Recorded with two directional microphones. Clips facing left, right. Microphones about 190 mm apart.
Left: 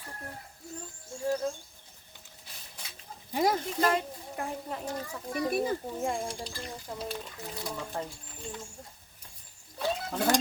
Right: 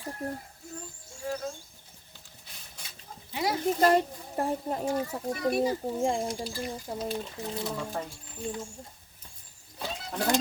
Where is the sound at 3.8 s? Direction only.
40° right (ahead or behind).